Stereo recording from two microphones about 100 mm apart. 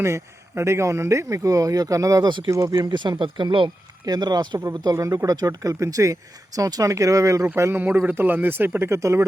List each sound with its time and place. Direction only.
0.0 s speech: 30° right (ahead or behind)
2.9 s speech: 50° right (ahead or behind)
4.0 s speech: 40° right (ahead or behind)